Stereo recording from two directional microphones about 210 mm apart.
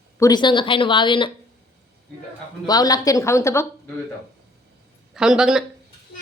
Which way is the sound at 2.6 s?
20° left (ahead or behind).